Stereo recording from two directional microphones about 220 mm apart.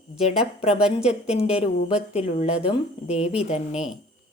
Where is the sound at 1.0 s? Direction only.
30° left (ahead or behind).